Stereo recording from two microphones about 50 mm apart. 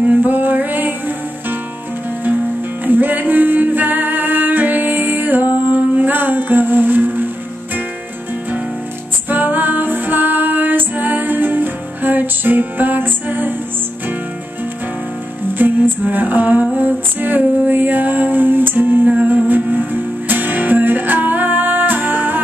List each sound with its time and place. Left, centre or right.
0.0 s music: right
2.8 s music: right
9.3 s music: right
15.5 s music: right
16.7 s female singing: right
19.0 s music: right